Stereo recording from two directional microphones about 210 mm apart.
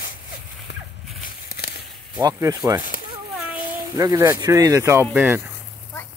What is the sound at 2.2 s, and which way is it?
Speech, 15° right (ahead or behind).